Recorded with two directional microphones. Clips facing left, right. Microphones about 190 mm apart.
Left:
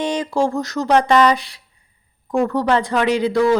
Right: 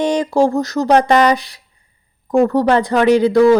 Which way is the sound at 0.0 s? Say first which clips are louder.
Right 5 dB; 45° right (ahead or behind).